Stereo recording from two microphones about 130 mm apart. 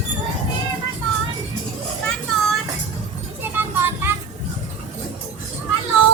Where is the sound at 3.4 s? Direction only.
15° right (ahead or behind).